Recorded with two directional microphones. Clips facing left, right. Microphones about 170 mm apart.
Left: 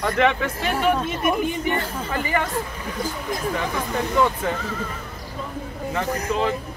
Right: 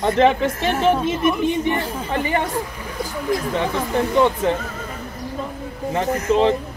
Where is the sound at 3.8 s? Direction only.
25° right (ahead or behind).